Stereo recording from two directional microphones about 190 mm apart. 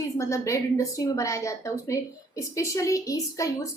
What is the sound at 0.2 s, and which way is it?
A woman's voice, 15° left (ahead or behind).